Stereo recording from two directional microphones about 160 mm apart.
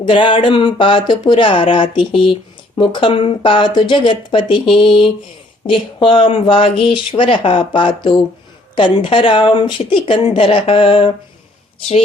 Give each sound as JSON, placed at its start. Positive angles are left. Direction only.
{"t": 0.0, "sound": "speech", "side_deg": 30}